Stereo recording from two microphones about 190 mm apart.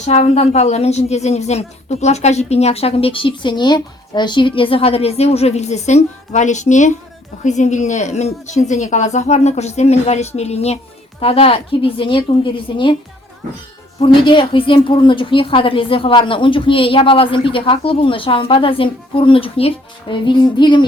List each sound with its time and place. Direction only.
0.0 s a woman's voice: 35° left (ahead or behind)
14.0 s a woman's voice: 25° left (ahead or behind)